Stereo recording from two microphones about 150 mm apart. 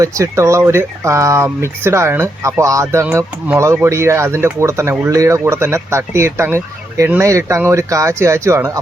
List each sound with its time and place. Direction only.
0.0 s speech: 20° right (ahead or behind)